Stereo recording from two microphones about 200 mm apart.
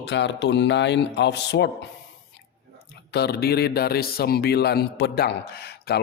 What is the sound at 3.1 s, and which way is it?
Speech, 55° left (ahead or behind).